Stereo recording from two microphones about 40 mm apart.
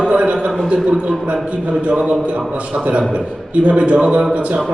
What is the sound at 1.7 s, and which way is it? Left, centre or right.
Speech, right.